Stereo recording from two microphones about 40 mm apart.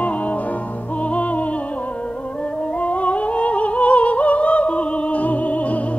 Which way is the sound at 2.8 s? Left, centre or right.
Left.